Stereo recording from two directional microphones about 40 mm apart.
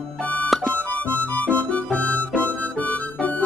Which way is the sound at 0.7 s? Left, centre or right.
Left.